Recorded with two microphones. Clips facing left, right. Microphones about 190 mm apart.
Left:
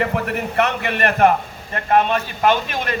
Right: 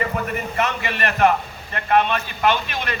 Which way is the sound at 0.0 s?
70° left (ahead or behind).